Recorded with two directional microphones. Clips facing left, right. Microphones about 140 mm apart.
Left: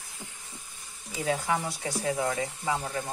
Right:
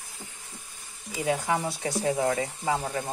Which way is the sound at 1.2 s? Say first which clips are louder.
Right 2 dB; 20° right (ahead or behind).